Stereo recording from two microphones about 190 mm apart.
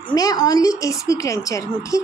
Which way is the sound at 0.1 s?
20° left (ahead or behind).